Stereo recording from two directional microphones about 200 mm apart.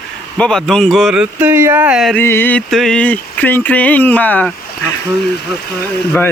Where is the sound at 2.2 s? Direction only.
10° left (ahead or behind).